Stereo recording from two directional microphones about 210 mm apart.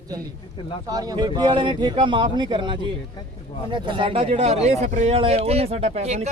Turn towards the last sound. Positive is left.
turn(degrees=-30)  # may be behind; listen again after turning